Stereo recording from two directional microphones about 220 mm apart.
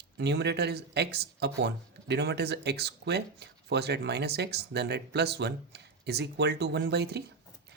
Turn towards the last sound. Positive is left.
turn(degrees=-50)  # may be behind; listen again after turning